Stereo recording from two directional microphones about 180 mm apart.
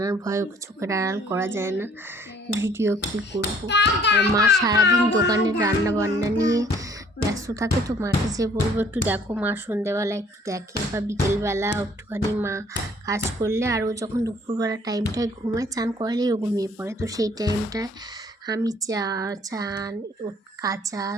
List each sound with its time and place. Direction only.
0.0 s speech: 20° right (ahead or behind)
3.7 s hands: 75° left (ahead or behind)
4.6 s speech: 20° right (ahead or behind)